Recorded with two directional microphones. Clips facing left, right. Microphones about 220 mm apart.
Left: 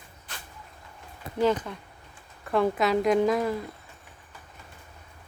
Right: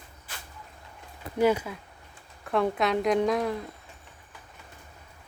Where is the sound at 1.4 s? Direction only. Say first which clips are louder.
Right 1 dB; 10° right (ahead or behind).